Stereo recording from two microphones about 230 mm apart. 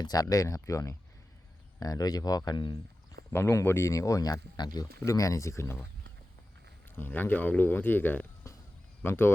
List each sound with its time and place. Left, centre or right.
0.0 s speech: centre
6.9 s speech: centre